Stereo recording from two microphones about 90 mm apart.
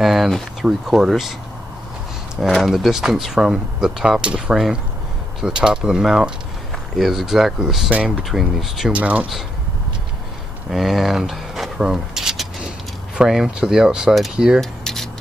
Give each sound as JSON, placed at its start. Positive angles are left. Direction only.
{"t": 0.0, "sound": "speech", "side_deg": 0}
{"t": 2.4, "sound": "speech", "side_deg": -5}
{"t": 8.9, "sound": "speech", "side_deg": -15}
{"t": 10.7, "sound": "a sound", "side_deg": 0}
{"t": 13.2, "sound": "speech", "side_deg": -5}
{"t": 14.6, "sound": "a sound", "side_deg": 5}